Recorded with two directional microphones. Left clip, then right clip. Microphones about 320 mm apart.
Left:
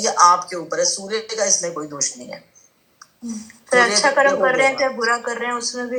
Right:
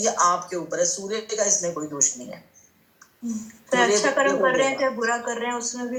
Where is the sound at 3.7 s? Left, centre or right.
Left.